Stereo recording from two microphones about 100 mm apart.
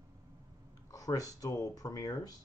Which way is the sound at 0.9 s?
35° left (ahead or behind).